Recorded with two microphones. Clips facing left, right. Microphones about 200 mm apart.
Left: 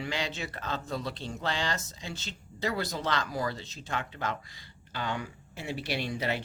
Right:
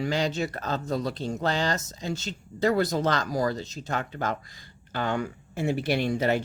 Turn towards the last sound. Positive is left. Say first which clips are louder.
# right 7 dB
turn(degrees=-45)  # may be behind; listen again after turning